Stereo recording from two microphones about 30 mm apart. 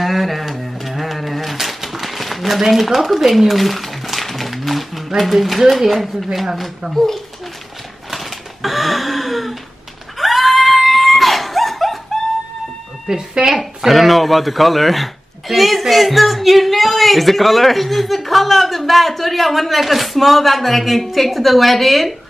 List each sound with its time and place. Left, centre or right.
0.0 s a sound: centre
2.6 s speech: centre
4.0 s a sound: centre
4.3 s speech: centre
6.9 s speech: centre
8.1 s a sound: centre
10.1 s screaming: centre
13.1 s speech: right
13.5 s speech: centre